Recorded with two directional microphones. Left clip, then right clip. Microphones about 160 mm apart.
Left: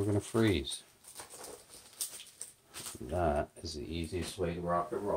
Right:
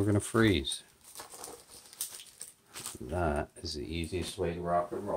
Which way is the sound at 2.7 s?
20° right (ahead or behind).